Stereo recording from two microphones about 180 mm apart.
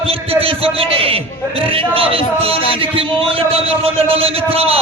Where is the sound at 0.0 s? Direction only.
30° right (ahead or behind).